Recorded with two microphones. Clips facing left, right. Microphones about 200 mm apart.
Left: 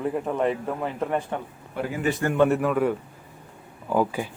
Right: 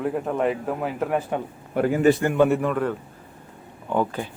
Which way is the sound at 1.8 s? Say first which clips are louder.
Right 8 dB; 50° right (ahead or behind).